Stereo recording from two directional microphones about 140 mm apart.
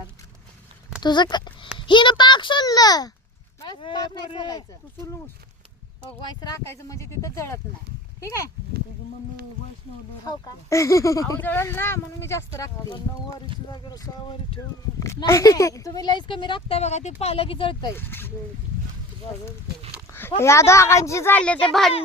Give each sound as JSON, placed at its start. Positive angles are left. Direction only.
{"t": 1.0, "sound": "speech", "side_deg": 30}
{"t": 6.2, "sound": "speech", "side_deg": 25}
{"t": 10.2, "sound": "speech", "side_deg": 25}
{"t": 15.3, "sound": "speech", "side_deg": 20}
{"t": 17.9, "sound": "speech", "side_deg": 15}
{"t": 20.4, "sound": "speech", "side_deg": 20}